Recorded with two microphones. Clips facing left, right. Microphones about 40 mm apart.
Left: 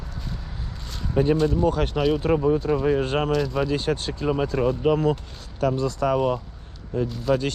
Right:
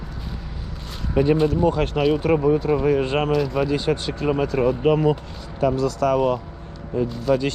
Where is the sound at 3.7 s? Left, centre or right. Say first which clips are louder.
Right 3 dB; right.